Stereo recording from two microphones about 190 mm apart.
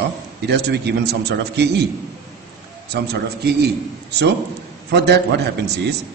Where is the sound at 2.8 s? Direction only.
60° right (ahead or behind).